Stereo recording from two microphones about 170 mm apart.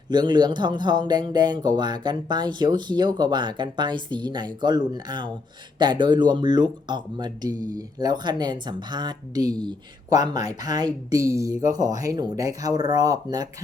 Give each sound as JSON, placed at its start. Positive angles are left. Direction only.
{"t": 0.1, "sound": "speech", "side_deg": -25}